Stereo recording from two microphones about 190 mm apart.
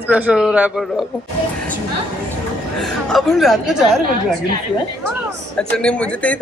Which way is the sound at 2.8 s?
Centre (ahead or behind).